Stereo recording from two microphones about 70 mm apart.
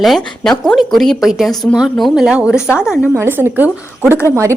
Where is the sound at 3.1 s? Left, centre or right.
Right.